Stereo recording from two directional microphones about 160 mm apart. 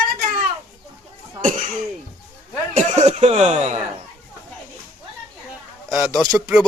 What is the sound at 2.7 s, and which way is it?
Speech, 45° right (ahead or behind).